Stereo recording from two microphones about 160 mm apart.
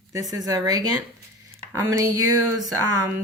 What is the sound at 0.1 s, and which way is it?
Speech, 20° right (ahead or behind).